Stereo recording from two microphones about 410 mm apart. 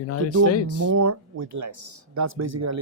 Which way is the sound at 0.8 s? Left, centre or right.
Right.